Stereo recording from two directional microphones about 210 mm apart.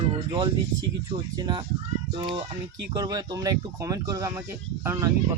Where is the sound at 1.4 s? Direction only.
20° right (ahead or behind).